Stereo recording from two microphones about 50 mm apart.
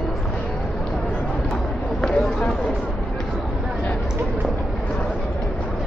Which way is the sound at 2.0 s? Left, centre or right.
Centre.